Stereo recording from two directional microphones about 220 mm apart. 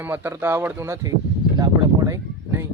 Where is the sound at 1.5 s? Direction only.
15° right (ahead or behind).